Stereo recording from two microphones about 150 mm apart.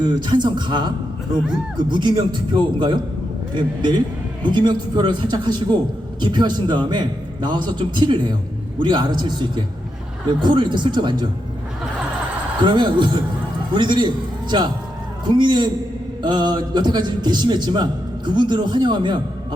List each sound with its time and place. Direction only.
0.0 s a man's voice: 30° right (ahead or behind)
12.6 s a man's voice: 30° right (ahead or behind)
15.3 s a man's voice: 30° right (ahead or behind)